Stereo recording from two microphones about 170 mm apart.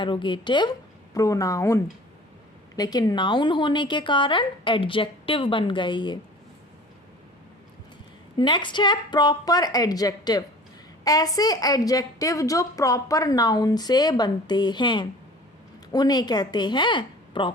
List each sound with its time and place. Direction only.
0.0 s a woman's voice: 30° left (ahead or behind)
8.4 s a woman's voice: 25° left (ahead or behind)